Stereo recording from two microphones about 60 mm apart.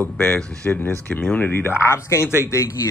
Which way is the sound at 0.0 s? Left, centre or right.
Left.